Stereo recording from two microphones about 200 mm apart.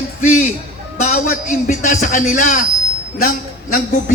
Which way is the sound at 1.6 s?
40° left (ahead or behind).